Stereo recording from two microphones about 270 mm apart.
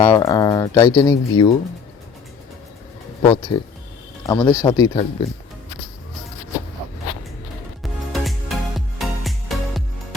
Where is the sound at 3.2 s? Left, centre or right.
Centre.